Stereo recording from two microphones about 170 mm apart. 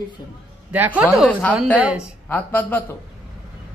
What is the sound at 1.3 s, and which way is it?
Speech, 10° left (ahead or behind).